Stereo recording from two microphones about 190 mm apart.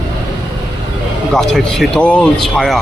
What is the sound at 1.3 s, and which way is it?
Speech, centre (ahead or behind).